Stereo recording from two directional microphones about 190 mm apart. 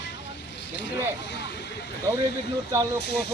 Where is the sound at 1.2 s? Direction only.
65° left (ahead or behind).